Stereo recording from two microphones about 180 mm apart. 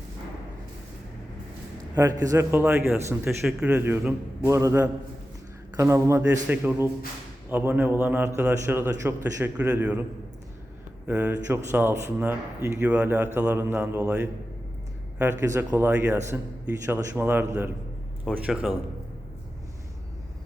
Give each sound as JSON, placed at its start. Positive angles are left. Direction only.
{"t": 2.0, "sound": "a man's voice", "side_deg": -15}